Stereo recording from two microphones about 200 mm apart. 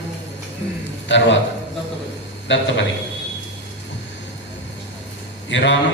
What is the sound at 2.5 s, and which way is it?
Mantra, 65° left (ahead or behind).